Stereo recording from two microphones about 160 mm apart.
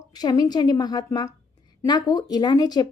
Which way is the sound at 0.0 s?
25° left (ahead or behind).